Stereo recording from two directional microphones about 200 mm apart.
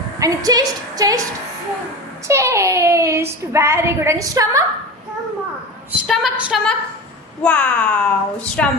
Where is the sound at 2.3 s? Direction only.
15° right (ahead or behind).